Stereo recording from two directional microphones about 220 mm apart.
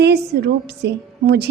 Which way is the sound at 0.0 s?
45° right (ahead or behind).